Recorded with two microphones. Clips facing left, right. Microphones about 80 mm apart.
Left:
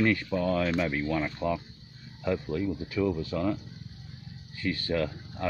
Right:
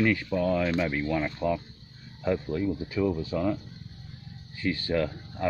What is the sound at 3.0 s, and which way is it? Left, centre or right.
Speech, centre.